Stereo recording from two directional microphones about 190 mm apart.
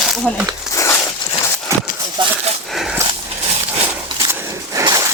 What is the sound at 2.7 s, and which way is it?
Dog, centre (ahead or behind).